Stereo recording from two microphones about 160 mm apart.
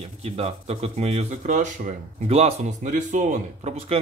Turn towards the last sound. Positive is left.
turn(degrees=-45)  # may be behind; listen again after turning